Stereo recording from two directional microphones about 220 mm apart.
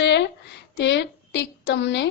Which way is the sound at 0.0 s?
50° left (ahead or behind).